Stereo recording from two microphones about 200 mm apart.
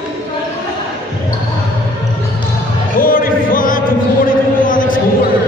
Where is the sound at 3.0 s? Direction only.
45° left (ahead or behind).